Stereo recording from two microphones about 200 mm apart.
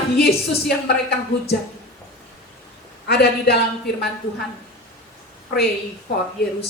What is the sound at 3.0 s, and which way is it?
A woman's voice, 50° left (ahead or behind).